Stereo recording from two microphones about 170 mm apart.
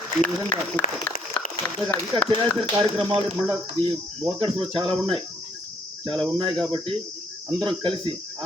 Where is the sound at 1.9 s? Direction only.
15° left (ahead or behind).